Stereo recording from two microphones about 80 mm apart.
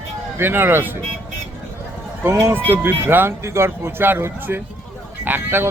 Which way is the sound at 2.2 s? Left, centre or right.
Right.